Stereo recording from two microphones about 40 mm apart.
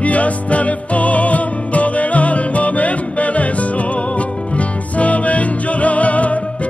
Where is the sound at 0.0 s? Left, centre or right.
Left.